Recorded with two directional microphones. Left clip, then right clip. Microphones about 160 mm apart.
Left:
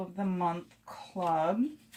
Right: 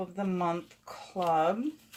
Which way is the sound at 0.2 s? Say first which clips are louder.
Right 1 dB; 55° right (ahead or behind).